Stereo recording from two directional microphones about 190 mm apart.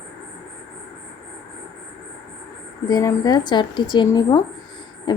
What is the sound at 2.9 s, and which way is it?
A woman's voice, 20° left (ahead or behind).